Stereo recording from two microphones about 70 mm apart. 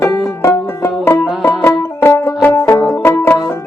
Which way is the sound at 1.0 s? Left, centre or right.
Left.